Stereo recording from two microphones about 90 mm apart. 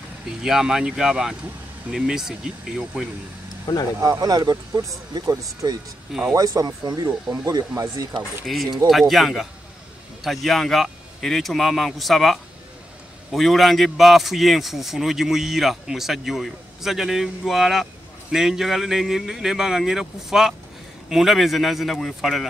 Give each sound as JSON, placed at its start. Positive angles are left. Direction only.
{"t": 0.3, "sound": "speech", "side_deg": -5}
{"t": 3.7, "sound": "speech", "side_deg": 40}
{"t": 4.0, "sound": "speech", "side_deg": -45}
{"t": 8.5, "sound": "a man's voice", "side_deg": 0}